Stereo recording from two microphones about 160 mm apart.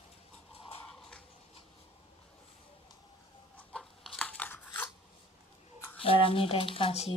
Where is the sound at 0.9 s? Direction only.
5° left (ahead or behind).